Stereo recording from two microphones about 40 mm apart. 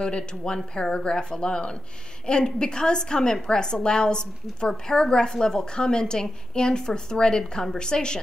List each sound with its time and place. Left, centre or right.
0.0 s a woman's voice: left